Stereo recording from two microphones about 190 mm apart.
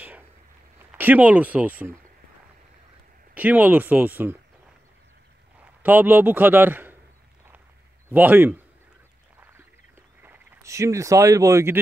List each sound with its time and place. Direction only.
0.7 s speech: 10° right (ahead or behind)
3.3 s speech: 10° right (ahead or behind)
5.8 s a man's voice: 10° right (ahead or behind)
8.1 s speech: 10° right (ahead or behind)
10.2 s speech: 10° right (ahead or behind)